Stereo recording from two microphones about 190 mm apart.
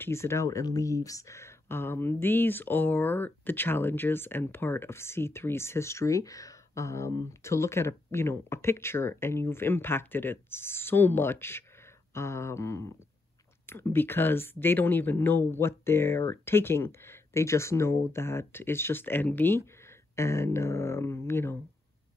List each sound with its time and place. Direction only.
0.0 s speech: 15° left (ahead or behind)